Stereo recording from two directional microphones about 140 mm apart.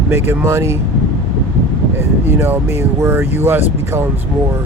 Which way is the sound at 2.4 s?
20° right (ahead or behind).